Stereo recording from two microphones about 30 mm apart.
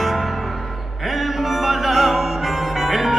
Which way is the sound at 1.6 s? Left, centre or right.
Centre.